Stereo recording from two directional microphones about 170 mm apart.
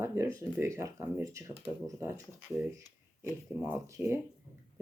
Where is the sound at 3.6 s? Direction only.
15° right (ahead or behind).